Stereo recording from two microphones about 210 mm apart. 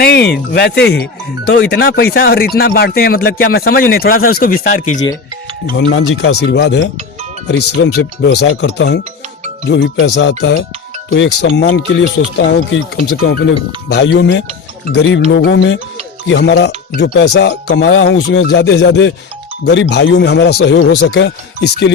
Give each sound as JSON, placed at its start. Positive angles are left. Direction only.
{"t": 0.0, "sound": "speech", "side_deg": 50}
{"t": 5.7, "sound": "speech", "side_deg": 75}
{"t": 6.4, "sound": "speech", "side_deg": 55}
{"t": 13.0, "sound": "speech", "side_deg": 45}